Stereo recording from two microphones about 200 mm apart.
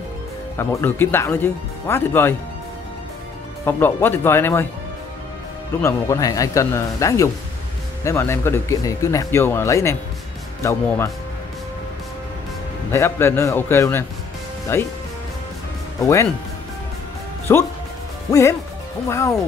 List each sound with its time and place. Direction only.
0.6 s speech: 10° left (ahead or behind)
3.6 s speech: 10° left (ahead or behind)
5.8 s speech: 15° left (ahead or behind)
12.9 s speech: 15° left (ahead or behind)
17.5 s speech: 15° left (ahead or behind)